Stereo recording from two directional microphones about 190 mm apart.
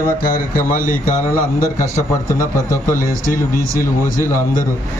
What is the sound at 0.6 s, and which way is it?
Speech, 45° left (ahead or behind).